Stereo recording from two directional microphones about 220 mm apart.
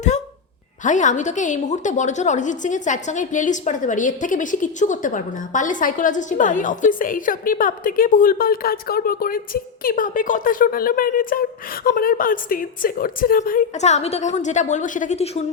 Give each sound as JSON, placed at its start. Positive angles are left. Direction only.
{"t": 0.9, "sound": "a woman's voice", "side_deg": 35}